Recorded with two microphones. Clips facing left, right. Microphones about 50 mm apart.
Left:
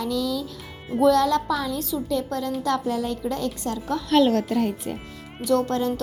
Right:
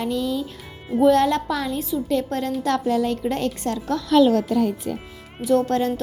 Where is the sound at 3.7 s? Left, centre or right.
Right.